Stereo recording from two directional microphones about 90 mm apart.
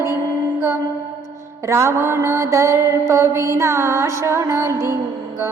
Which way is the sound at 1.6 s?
30° right (ahead or behind).